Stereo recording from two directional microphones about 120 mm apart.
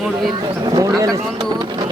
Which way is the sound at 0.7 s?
30° right (ahead or behind).